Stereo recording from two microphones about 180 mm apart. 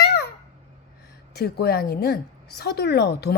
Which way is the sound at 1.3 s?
60° left (ahead or behind).